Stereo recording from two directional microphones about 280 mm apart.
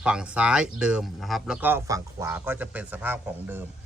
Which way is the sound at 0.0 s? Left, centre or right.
Centre.